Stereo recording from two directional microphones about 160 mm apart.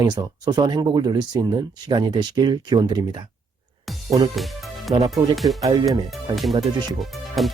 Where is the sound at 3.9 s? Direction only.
Centre (ahead or behind).